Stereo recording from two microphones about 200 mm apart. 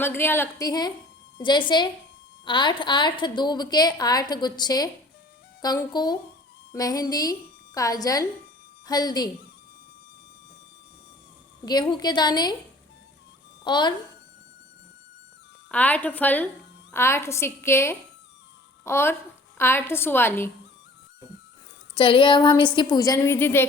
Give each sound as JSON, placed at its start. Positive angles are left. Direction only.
{"t": 0.0, "sound": "a woman's voice", "side_deg": 10}
{"t": 11.6, "sound": "a woman's voice", "side_deg": 20}
{"t": 13.7, "sound": "a woman's voice", "side_deg": 20}
{"t": 15.7, "sound": "speech", "side_deg": 10}
{"t": 21.9, "sound": "a woman's voice", "side_deg": 25}